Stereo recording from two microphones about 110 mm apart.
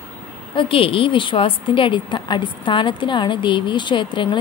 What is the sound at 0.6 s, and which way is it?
A woman's voice, 55° left (ahead or behind).